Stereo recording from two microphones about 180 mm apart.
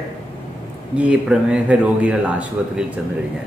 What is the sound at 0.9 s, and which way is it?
Speech, 5° right (ahead or behind).